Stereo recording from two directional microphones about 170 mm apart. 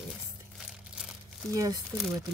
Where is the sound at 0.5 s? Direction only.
5° right (ahead or behind).